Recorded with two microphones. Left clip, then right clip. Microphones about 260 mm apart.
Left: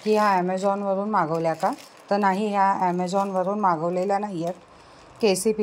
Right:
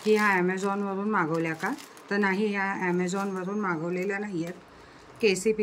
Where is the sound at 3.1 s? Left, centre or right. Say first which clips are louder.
Left 8 dB; centre.